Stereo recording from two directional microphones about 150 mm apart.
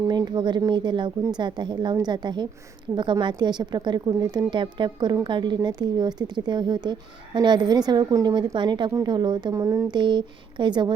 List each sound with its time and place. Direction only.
0.1 s a woman's voice: 30° right (ahead or behind)